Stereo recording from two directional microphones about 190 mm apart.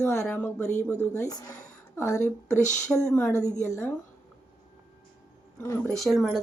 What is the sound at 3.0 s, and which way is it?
Speech, 5° left (ahead or behind).